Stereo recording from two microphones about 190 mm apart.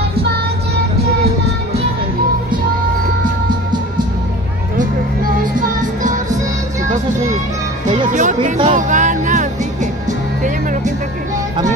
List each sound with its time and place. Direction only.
5.6 s music: 40° right (ahead or behind)
8.1 s speech: 40° right (ahead or behind)
8.6 s music: 40° right (ahead or behind)